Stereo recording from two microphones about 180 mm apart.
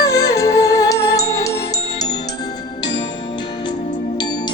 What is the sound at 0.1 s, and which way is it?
Music, 20° left (ahead or behind).